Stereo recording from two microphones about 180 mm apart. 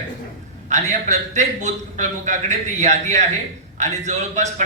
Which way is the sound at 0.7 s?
40° right (ahead or behind).